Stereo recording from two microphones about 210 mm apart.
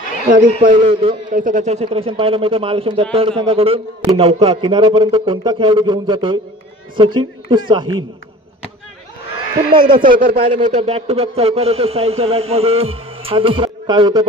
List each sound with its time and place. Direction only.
0.2 s a man's voice: 40° right (ahead or behind); by 7.9 s 20° right (ahead or behind)
9.7 s a man's voice: 20° right (ahead or behind)
10.0 s speech: 40° right (ahead or behind)
10.3 s a man's voice: 30° right (ahead or behind)